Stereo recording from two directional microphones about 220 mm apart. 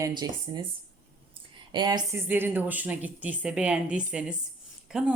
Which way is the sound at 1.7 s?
20° right (ahead or behind).